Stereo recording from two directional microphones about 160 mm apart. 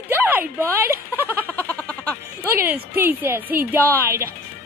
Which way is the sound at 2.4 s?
10° right (ahead or behind).